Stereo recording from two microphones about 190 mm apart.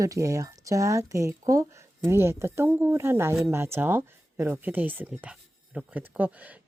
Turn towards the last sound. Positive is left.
turn(degrees=-10)  # may be behind; listen again after turning